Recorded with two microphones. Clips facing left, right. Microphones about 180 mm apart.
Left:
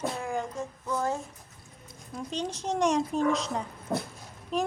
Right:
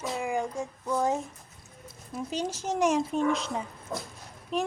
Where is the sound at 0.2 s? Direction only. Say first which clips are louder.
Right 2 dB; 10° right (ahead or behind).